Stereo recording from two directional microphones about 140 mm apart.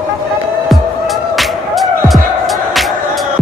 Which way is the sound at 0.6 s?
Centre (ahead or behind).